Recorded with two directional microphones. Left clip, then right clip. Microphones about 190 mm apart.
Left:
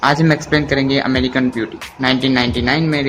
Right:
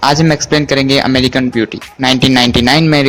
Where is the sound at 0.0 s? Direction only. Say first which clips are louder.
Right 3 dB; 35° right (ahead or behind).